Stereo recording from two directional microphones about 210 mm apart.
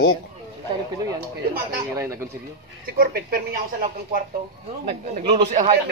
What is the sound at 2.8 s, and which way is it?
Speech, 45° right (ahead or behind).